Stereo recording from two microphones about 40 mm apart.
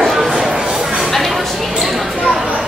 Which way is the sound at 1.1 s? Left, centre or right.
Centre.